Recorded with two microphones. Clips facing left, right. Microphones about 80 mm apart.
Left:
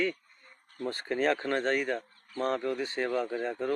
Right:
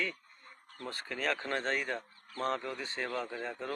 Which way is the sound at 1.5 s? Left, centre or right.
Centre.